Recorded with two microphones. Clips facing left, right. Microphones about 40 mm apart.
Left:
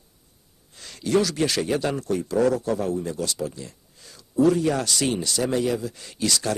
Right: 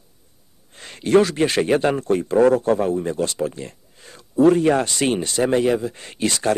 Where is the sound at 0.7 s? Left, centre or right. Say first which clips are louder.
Right 6 dB; right.